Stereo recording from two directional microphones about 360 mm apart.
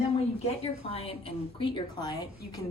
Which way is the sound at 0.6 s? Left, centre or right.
Centre.